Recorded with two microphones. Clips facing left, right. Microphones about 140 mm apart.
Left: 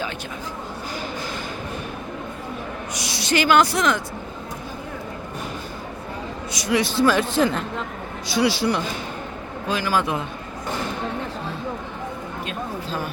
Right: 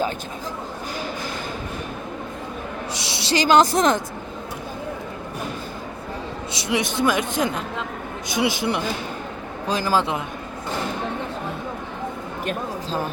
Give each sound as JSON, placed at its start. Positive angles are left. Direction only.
{"t": 2.9, "sound": "a sound", "side_deg": -25}
{"t": 3.4, "sound": "a woman's voice", "side_deg": -40}
{"t": 6.5, "sound": "a man's voice", "side_deg": -25}
{"t": 9.6, "sound": "a man's voice", "side_deg": -35}